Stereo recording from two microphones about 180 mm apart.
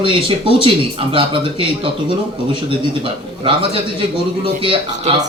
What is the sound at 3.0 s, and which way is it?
Speech, 30° right (ahead or behind).